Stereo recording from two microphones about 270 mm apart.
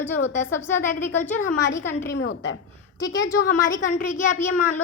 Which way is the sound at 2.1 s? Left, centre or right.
Left.